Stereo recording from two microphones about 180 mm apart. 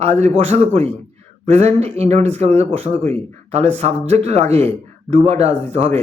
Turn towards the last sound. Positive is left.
turn(degrees=-35)  # may be behind; listen again after turning